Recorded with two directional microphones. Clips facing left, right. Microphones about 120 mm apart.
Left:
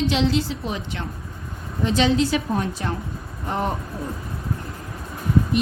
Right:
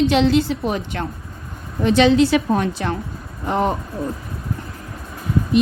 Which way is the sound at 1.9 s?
70° right (ahead or behind).